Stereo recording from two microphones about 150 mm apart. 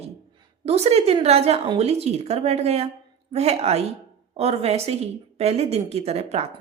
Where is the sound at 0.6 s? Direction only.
45° right (ahead or behind).